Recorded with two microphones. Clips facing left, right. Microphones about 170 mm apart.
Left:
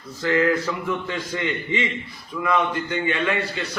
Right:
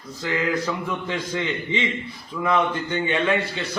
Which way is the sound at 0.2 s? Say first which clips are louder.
Left 5 dB; 15° right (ahead or behind).